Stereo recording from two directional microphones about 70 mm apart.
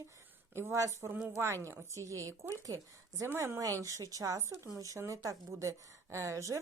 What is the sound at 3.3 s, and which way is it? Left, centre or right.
Speech, right.